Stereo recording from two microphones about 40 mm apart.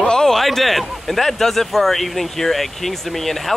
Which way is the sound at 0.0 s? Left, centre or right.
Centre.